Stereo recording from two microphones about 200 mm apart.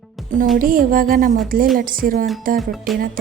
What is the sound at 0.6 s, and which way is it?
Speech, 45° right (ahead or behind).